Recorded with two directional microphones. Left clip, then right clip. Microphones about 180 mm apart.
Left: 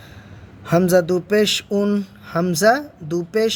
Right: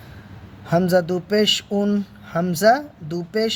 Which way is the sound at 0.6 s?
25° left (ahead or behind).